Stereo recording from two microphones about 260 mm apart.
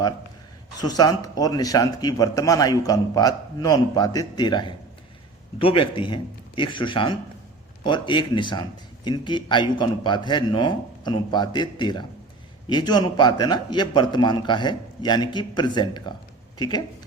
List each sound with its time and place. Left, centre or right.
0.8 s a man's voice: centre